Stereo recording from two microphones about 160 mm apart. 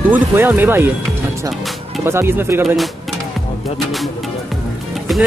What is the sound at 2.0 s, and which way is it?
Speech, 15° right (ahead or behind).